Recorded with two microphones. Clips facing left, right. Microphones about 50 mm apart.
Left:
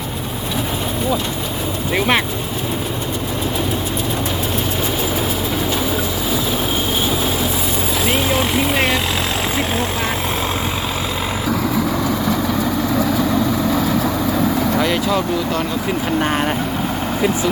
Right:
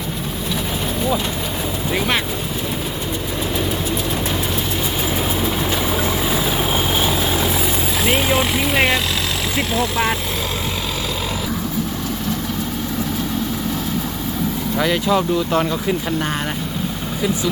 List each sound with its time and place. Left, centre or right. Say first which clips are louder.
1.9 s speech: left 4 dB; centre
8.0 s vehicle: right 1 dB; centre
14.8 s speech: even; centre